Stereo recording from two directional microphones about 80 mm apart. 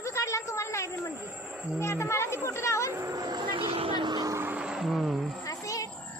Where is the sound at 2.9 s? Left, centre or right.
Right.